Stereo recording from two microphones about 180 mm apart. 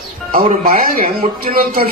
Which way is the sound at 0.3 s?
50° right (ahead or behind).